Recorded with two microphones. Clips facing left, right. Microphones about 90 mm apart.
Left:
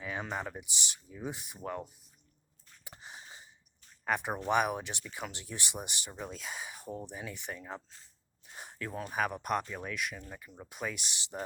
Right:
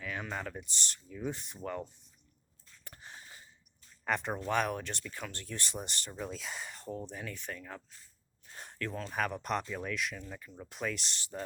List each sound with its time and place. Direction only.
0.0 s speech: 20° left (ahead or behind)
2.8 s a sound: 15° left (ahead or behind)
4.0 s speech: 5° left (ahead or behind); by 8.1 s 30° left (ahead or behind)
8.4 s speech: 10° left (ahead or behind)
11.2 s speech: 20° left (ahead or behind)